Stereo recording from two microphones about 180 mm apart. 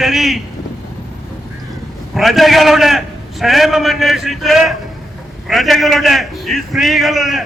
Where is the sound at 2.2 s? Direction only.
Centre (ahead or behind).